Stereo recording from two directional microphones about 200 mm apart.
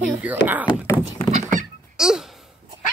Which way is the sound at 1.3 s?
35° right (ahead or behind).